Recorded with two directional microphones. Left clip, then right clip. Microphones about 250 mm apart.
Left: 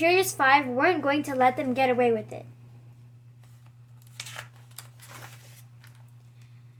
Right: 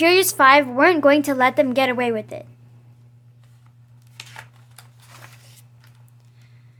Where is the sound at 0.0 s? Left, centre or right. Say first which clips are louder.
Right 8 dB; right.